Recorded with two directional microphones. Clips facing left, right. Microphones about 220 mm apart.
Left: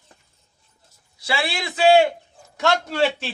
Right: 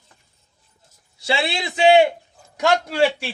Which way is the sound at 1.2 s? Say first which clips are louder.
Right 3 dB; 25° right (ahead or behind).